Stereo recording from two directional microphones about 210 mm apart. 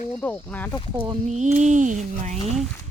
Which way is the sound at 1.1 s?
35° right (ahead or behind).